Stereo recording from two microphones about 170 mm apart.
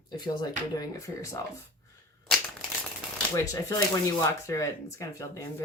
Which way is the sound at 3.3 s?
20° left (ahead or behind).